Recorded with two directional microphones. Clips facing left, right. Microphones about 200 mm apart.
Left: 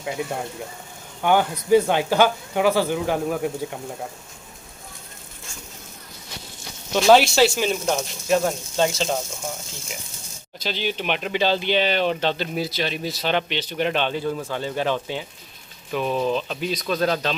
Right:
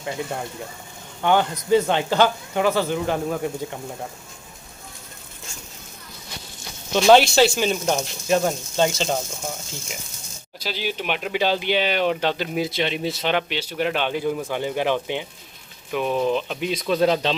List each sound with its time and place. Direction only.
0.0 s speech: 5° left (ahead or behind)
6.9 s speech: 5° left (ahead or behind)
10.6 s speech: 5° right (ahead or behind)
13.3 s speech: 10° right (ahead or behind)